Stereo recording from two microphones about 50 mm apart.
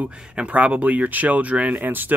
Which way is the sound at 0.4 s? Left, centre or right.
Right.